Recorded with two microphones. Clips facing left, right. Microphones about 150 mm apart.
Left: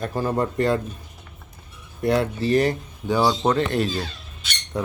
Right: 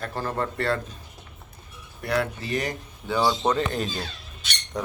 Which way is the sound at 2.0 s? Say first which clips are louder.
Left 5 dB; 25° left (ahead or behind).